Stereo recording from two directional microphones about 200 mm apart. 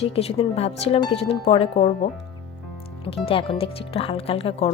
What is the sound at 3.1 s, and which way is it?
Speech, 30° left (ahead or behind).